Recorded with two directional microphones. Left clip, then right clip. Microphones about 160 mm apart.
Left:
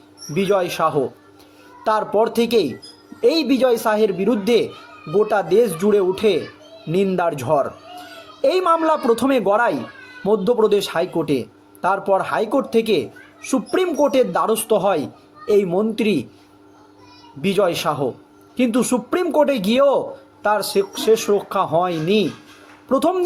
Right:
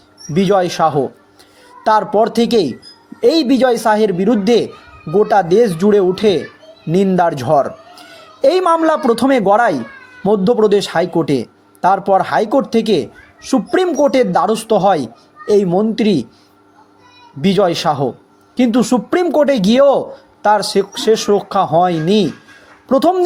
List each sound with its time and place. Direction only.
0.3 s speech: 35° right (ahead or behind)
17.4 s speech: 35° right (ahead or behind)